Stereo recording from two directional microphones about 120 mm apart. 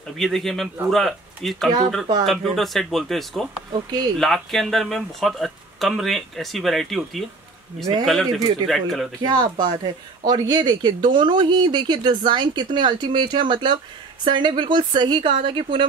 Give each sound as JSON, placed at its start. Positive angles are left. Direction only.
{"t": 0.2, "sound": "speech", "side_deg": 0}
{"t": 8.4, "sound": "speech", "side_deg": -30}
{"t": 8.6, "sound": "speech", "side_deg": 0}
{"t": 9.2, "sound": "speech", "side_deg": -35}